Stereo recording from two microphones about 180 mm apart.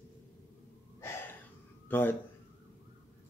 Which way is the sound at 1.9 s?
10° left (ahead or behind).